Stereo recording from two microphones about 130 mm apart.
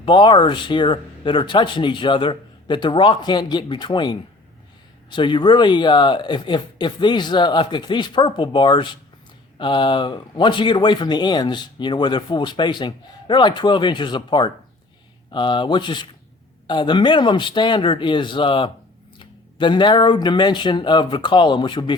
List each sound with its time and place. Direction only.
0.0 s speech: 40° left (ahead or behind)